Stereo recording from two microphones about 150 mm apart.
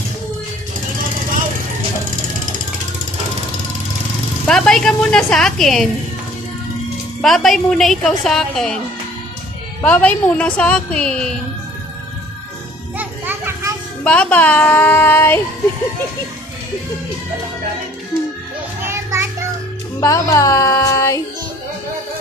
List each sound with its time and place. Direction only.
4.4 s a woman's voice: 5° left (ahead or behind)
7.2 s a woman's voice: 5° left (ahead or behind)
9.8 s a woman's voice: 10° left (ahead or behind)
13.0 s children playing: 15° right (ahead or behind)
14.0 s a woman's voice: 10° left (ahead or behind)
18.9 s music: 15° right (ahead or behind)
20.0 s music: 20° left (ahead or behind)